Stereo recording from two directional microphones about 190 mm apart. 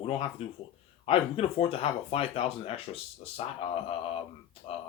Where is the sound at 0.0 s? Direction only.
30° left (ahead or behind).